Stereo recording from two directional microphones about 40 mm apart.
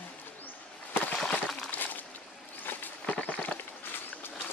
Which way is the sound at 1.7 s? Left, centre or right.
Left.